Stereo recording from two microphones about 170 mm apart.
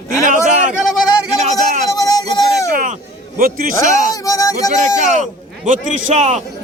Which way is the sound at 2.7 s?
50° right (ahead or behind).